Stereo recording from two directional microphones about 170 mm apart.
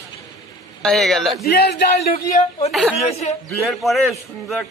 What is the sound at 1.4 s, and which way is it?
Speech, 70° left (ahead or behind).